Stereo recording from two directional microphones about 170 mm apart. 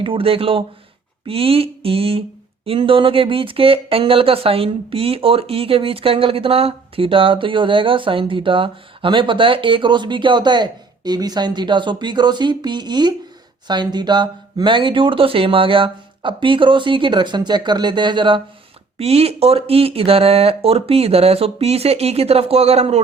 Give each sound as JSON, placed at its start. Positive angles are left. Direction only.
{"t": 0.0, "sound": "speech", "side_deg": -30}